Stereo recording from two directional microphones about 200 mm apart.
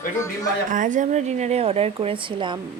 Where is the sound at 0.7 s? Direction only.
40° right (ahead or behind); by 2.6 s 25° right (ahead or behind).